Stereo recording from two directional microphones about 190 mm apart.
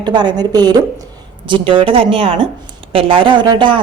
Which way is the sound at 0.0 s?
25° right (ahead or behind).